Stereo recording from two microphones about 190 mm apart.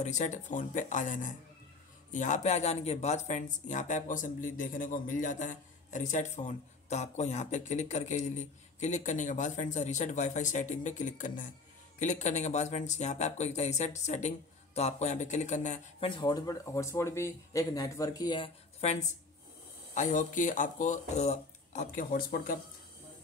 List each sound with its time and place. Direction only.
0.0 s speech: 40° left (ahead or behind)
16.1 s speech: 20° left (ahead or behind); by 22.6 s 50° left (ahead or behind)